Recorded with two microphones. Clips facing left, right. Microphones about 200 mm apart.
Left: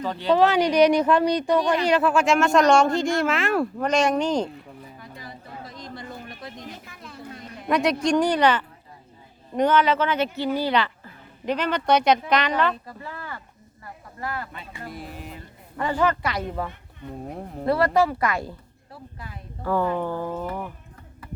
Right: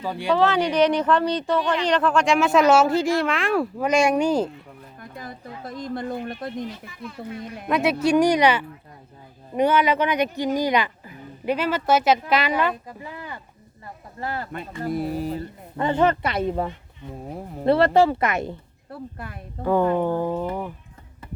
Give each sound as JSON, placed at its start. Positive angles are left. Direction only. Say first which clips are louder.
{"t": 0.0, "sound": "speech", "louder": "left 1 dB", "side_deg": -10}
{"t": 0.3, "sound": "speech", "louder": "left 2 dB", "side_deg": 15}
{"t": 4.9, "sound": "music", "louder": "right 3 dB", "side_deg": -50}
{"t": 7.7, "sound": "speech", "louder": "right 1 dB", "side_deg": -5}
{"t": 13.8, "sound": "a sound", "louder": "right 2 dB", "side_deg": -30}
{"t": 14.8, "sound": "speech", "louder": "right 13 dB", "side_deg": -40}
{"t": 15.8, "sound": "a woman's voice", "louder": "right 3 dB", "side_deg": -25}
{"t": 17.2, "sound": "speech", "louder": "right 2 dB", "side_deg": -5}
{"t": 17.7, "sound": "a woman's voice", "louder": "right 4 dB", "side_deg": -25}
{"t": 18.9, "sound": "a woman's voice", "louder": "right 6 dB", "side_deg": -55}
{"t": 19.6, "sound": "a woman's voice", "louder": "right 4 dB", "side_deg": -20}